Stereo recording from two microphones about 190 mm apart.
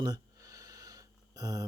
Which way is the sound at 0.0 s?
20° right (ahead or behind).